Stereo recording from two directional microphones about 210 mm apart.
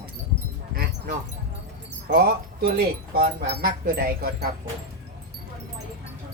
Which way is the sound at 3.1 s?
45° right (ahead or behind).